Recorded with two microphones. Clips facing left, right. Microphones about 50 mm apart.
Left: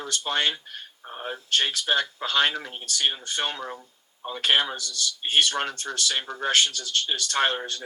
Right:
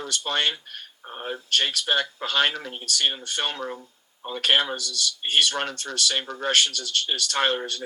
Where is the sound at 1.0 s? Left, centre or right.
Centre.